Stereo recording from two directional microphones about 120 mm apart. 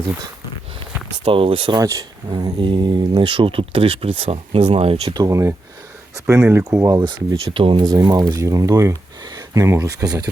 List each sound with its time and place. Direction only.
1.2 s speech: 50° right (ahead or behind)
1.7 s speech: 30° right (ahead or behind); by 5.1 s 55° right (ahead or behind)
5.1 s speech: 30° right (ahead or behind)
7.0 s speech: 40° right (ahead or behind)